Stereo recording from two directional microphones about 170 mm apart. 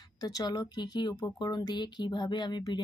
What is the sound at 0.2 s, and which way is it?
Speech, 20° left (ahead or behind).